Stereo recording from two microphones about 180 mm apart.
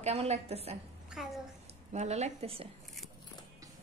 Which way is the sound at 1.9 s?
40° right (ahead or behind).